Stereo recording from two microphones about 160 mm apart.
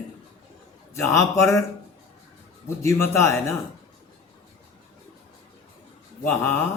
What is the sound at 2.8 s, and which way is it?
Speech, 15° left (ahead or behind).